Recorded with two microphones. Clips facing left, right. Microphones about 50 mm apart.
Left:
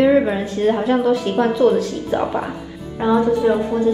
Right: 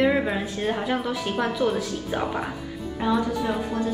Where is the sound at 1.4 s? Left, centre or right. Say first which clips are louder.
Left 10 dB; centre.